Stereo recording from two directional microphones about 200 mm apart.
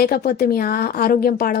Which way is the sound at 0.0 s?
50° left (ahead or behind).